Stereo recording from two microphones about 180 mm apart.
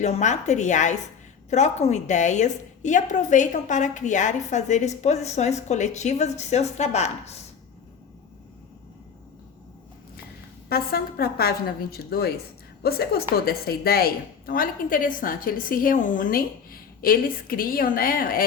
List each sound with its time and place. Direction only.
0.0 s a woman's voice: 40° left (ahead or behind)
10.7 s a woman's voice: 55° left (ahead or behind)